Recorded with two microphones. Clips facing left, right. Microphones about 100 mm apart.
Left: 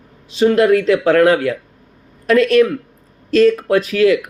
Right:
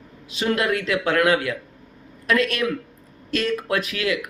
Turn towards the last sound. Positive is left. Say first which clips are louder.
# left 11 dB
turn(degrees=35)  # may be behind; listen again after turning